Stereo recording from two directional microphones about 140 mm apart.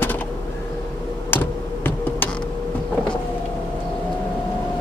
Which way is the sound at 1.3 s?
15° left (ahead or behind).